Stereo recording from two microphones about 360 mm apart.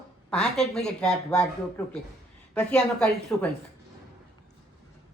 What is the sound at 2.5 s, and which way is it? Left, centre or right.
Speech, centre.